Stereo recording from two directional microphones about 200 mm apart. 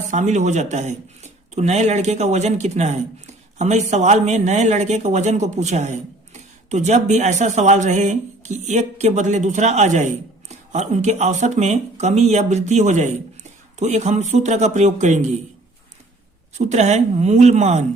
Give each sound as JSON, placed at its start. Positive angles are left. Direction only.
{"t": 0.1, "sound": "speech", "side_deg": -35}
{"t": 16.6, "sound": "speech", "side_deg": -35}